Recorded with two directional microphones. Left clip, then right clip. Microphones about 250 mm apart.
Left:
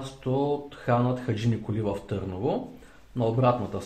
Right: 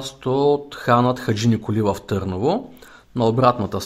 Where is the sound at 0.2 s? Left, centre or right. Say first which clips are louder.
Right 9 dB; right.